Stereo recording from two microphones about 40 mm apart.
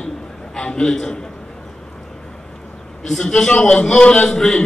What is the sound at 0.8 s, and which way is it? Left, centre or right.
Speech, centre.